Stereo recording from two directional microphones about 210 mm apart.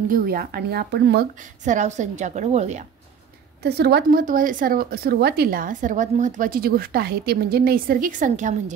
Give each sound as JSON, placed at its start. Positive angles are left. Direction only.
{"t": 0.1, "sound": "a woman's voice", "side_deg": -45}
{"t": 1.6, "sound": "a woman's voice", "side_deg": -35}
{"t": 3.6, "sound": "a woman's voice", "side_deg": -50}